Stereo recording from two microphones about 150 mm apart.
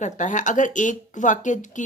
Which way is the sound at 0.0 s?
55° left (ahead or behind).